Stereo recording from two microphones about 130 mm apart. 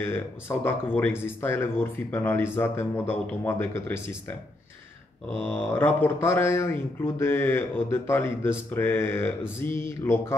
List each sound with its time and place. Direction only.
0.0 s speech: 20° left (ahead or behind)
5.4 s speech: 15° left (ahead or behind)